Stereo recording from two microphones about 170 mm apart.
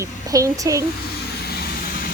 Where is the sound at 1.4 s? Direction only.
70° left (ahead or behind).